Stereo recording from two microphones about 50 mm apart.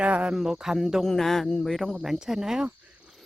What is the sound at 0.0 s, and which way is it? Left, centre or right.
Speech, right.